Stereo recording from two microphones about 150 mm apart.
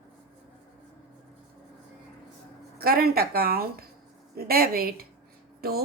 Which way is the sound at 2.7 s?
90° right.